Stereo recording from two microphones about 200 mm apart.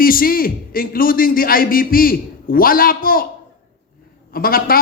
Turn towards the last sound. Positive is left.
turn(degrees=45)  # may be behind; listen again after turning